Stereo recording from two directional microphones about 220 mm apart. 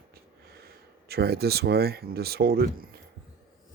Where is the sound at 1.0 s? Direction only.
45° right (ahead or behind).